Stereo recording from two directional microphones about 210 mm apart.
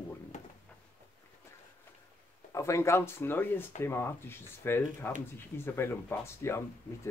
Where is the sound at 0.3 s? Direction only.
35° left (ahead or behind).